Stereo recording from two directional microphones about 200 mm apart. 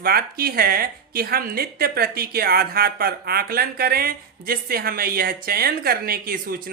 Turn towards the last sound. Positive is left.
turn(degrees=-45)  # may be behind; listen again after turning